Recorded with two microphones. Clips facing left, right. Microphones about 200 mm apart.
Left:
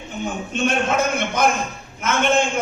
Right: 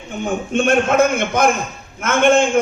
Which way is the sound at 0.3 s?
50° right (ahead or behind).